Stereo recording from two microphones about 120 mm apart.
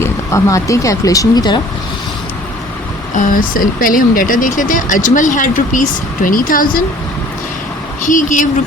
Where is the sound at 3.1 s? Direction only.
90° left.